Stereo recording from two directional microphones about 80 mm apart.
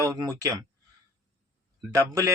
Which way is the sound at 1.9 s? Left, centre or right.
Right.